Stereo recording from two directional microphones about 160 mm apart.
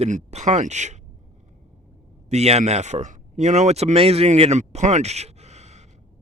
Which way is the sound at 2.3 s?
40° right (ahead or behind).